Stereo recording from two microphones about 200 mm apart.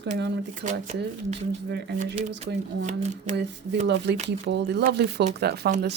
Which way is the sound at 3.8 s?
60° right (ahead or behind).